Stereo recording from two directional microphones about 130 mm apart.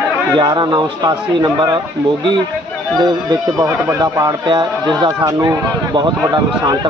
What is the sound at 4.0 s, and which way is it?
A man's voice, 35° right (ahead or behind).